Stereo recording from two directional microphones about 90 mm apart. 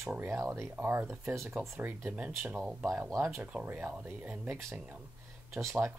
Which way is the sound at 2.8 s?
30° right (ahead or behind).